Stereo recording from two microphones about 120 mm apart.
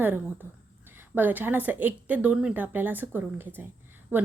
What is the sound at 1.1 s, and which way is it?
A woman's voice, 15° right (ahead or behind).